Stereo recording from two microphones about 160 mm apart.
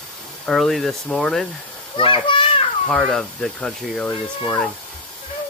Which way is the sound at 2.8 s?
5° left (ahead or behind).